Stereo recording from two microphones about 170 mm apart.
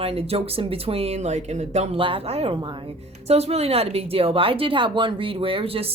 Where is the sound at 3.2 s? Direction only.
40° right (ahead or behind).